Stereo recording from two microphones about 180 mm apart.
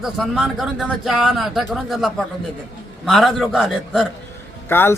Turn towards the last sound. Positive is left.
turn(degrees=10)  # may be behind; listen again after turning